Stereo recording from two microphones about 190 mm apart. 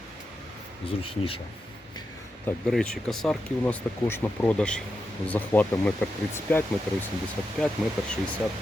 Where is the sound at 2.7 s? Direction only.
5° left (ahead or behind).